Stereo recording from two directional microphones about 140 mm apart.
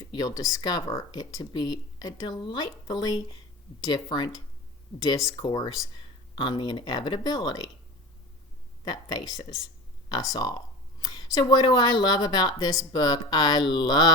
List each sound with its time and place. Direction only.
0.0 s speech: 30° left (ahead or behind)
8.9 s speech: 30° left (ahead or behind)